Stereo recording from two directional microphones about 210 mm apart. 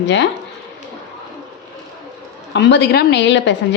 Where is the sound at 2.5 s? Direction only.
55° left (ahead or behind).